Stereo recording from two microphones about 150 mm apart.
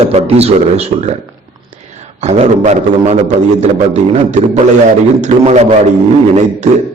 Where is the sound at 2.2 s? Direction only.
50° right (ahead or behind).